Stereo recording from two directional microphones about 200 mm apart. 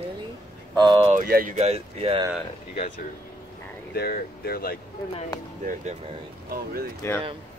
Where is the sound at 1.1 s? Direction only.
45° right (ahead or behind); by 2.2 s 30° right (ahead or behind).